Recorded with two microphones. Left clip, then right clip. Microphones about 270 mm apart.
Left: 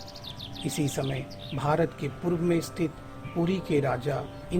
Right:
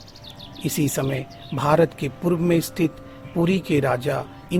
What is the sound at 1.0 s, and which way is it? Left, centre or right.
Speech, right.